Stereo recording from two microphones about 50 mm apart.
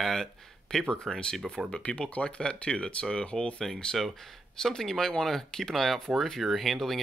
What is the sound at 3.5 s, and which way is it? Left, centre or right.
Speech, centre.